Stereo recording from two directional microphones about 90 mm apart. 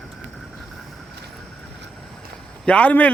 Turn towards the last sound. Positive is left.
turn(degrees=15)  # may be behind; listen again after turning